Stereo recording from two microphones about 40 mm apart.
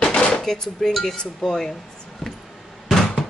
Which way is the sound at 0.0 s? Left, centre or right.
Left.